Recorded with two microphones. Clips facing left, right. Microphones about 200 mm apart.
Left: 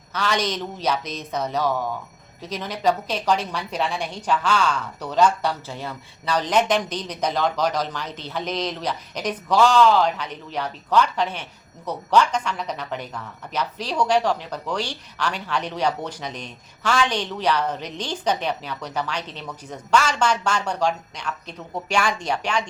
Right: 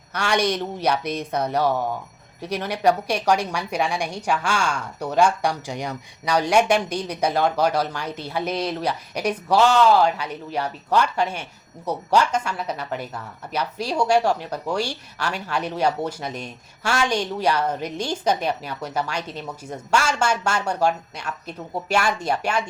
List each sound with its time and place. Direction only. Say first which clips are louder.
0.1 s a woman's voice: right 2 dB; 10° right (ahead or behind)